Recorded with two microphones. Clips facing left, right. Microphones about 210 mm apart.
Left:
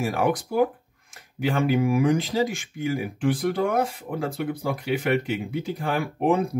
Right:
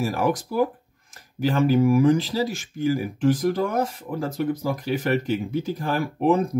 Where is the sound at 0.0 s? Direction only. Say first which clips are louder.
Even; 40° right (ahead or behind).